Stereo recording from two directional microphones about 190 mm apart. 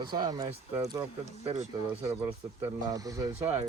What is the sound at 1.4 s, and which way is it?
Speech, 35° right (ahead or behind).